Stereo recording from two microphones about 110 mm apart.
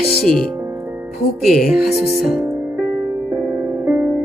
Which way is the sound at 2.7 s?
20° right (ahead or behind).